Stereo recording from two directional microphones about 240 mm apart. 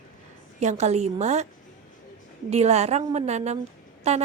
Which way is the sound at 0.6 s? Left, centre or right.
Right.